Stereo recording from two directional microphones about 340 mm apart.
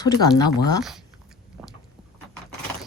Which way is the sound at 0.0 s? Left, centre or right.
Centre.